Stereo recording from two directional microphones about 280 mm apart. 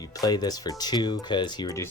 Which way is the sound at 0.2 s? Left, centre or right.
Centre.